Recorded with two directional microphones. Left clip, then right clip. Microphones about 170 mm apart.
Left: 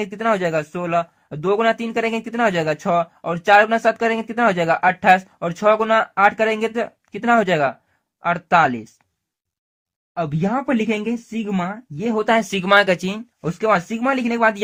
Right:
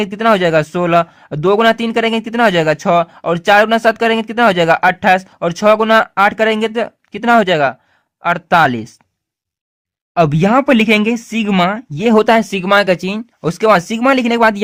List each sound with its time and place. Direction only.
0.0 s speech: 30° right (ahead or behind)
10.2 s speech: 45° right (ahead or behind)